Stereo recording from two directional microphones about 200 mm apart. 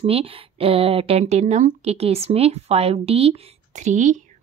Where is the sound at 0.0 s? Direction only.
30° right (ahead or behind).